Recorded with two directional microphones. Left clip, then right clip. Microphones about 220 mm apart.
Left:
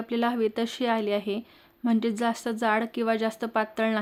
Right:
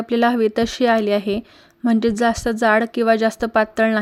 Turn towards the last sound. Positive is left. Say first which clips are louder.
# right 9 dB
turn(degrees=-30)  # may be behind; listen again after turning